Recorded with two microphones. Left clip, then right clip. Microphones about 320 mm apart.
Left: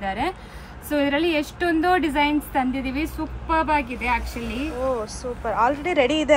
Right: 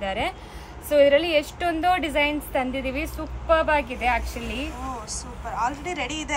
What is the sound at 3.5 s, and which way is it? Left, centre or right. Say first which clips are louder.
Speech: right 1 dB; right.